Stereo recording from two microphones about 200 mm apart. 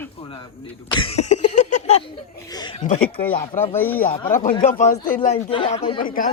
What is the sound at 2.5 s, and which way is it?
Speech, 20° left (ahead or behind).